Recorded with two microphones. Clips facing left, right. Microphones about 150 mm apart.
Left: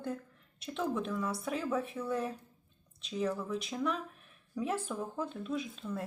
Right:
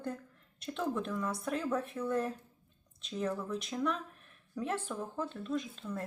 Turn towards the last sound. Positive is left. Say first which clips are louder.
# even
turn(degrees=5)  # may be behind; listen again after turning